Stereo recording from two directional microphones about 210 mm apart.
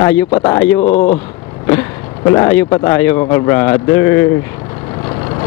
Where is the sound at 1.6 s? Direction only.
15° left (ahead or behind).